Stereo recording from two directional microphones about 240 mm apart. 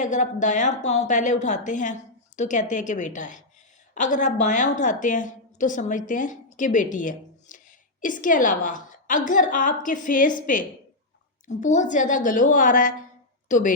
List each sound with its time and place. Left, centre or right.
0.0 s a woman's voice: left